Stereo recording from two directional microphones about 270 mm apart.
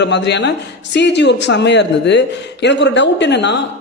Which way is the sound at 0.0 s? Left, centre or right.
Left.